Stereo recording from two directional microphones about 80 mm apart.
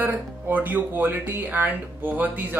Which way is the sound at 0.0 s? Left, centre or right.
Right.